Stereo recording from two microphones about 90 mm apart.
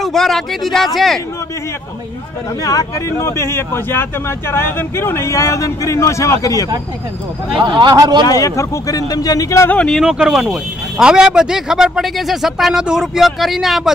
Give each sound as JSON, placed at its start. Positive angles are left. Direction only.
{"t": 0.0, "sound": "speech", "side_deg": 5}
{"t": 2.6, "sound": "speech", "side_deg": 40}
{"t": 3.1, "sound": "speech", "side_deg": 30}
{"t": 7.5, "sound": "a man's voice", "side_deg": -60}
{"t": 8.3, "sound": "speech", "side_deg": 40}
{"t": 9.7, "sound": "speech", "side_deg": 10}
{"t": 10.0, "sound": "speech", "side_deg": -10}